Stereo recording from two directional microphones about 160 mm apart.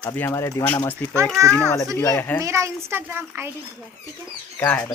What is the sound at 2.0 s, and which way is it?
Speech, 15° left (ahead or behind).